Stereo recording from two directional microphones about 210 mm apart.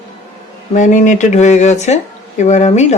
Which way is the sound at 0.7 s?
35° left (ahead or behind).